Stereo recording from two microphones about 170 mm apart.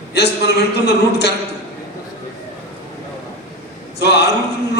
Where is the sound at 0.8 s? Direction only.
80° left.